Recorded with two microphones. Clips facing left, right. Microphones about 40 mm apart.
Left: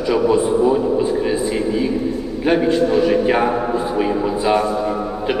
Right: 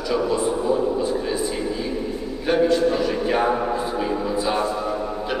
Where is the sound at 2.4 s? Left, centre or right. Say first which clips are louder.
Left 2 dB; left.